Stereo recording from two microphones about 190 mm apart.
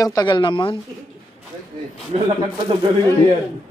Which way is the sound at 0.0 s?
20° left (ahead or behind).